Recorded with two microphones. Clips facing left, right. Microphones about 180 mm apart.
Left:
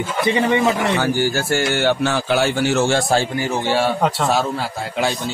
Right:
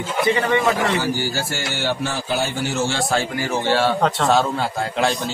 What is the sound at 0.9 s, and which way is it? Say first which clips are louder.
Speech: left 3 dB; 55° left (ahead or behind).